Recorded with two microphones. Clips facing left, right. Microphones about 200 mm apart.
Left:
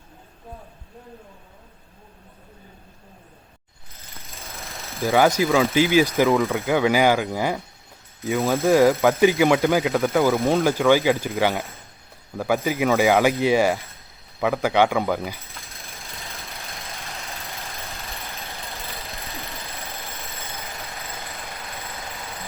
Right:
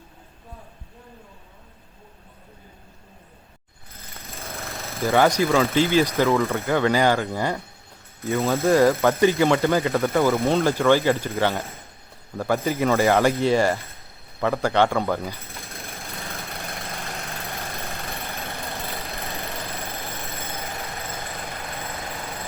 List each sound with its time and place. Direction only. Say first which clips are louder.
4.3 s engine: right 4 dB; centre (ahead or behind)
5.1 s speech: left 1 dB; 10° left (ahead or behind)
16.2 s engine: right 4 dB; centre (ahead or behind)
16.6 s vehicle: right 4 dB; centre (ahead or behind)
17.7 s vehicle: right 4 dB; 15° right (ahead or behind)
19.2 s a sound: right 4 dB; 15° right (ahead or behind)